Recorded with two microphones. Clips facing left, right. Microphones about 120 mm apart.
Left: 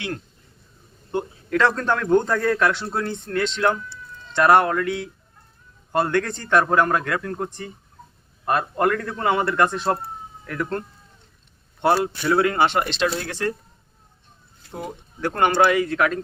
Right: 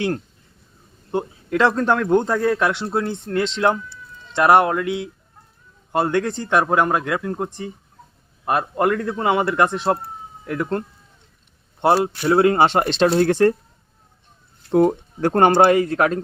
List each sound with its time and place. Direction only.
1.1 s a man's voice: 20° right (ahead or behind); by 13.6 s 50° right (ahead or behind)
14.7 s speech: 60° right (ahead or behind)
15.2 s speech: 40° right (ahead or behind)